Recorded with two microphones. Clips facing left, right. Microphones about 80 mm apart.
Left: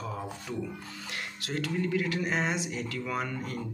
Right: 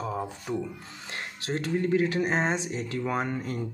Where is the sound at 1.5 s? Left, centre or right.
Right.